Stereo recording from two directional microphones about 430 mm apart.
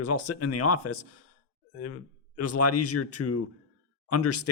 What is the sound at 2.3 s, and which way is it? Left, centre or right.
Speech, left.